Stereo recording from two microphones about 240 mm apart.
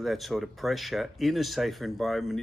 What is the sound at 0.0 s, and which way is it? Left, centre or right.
Speech, centre.